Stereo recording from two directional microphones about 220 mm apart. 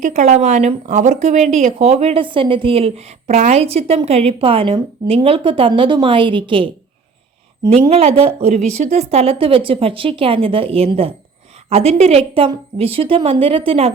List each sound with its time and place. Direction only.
0.0 s speech: 30° right (ahead or behind)